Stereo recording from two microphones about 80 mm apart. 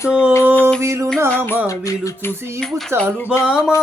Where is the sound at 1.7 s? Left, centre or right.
Left.